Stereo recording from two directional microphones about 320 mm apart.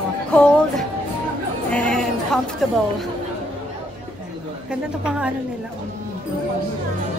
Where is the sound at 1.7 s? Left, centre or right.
Centre.